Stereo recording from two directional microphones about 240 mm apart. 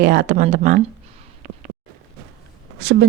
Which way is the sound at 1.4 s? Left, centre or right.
Right.